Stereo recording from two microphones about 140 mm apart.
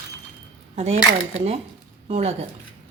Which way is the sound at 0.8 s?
50° right (ahead or behind).